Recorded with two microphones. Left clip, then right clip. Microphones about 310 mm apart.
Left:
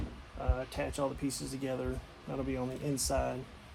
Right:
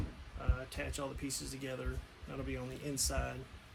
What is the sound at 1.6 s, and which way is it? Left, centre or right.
Speech, centre.